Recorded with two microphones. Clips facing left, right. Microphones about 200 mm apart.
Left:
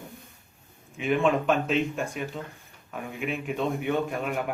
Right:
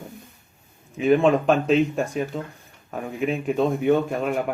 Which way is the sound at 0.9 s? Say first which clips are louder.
Right 6 dB; 40° right (ahead or behind).